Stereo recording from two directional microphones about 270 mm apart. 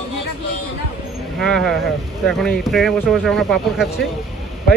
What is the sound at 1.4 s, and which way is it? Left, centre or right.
Speech, centre.